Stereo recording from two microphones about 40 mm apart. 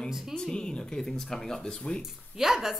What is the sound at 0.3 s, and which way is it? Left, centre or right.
Speech, left.